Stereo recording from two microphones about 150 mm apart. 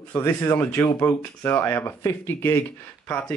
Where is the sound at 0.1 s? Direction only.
15° left (ahead or behind).